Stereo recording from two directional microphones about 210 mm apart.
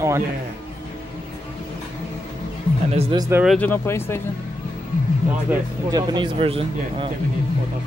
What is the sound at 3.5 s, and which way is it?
Speech, 10° left (ahead or behind).